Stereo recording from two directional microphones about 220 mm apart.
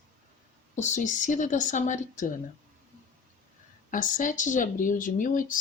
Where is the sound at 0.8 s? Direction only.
35° left (ahead or behind).